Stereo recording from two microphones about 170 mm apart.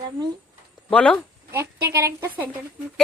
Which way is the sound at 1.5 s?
15° right (ahead or behind).